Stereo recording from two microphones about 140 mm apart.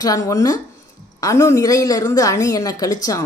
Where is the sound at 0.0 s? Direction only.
25° left (ahead or behind).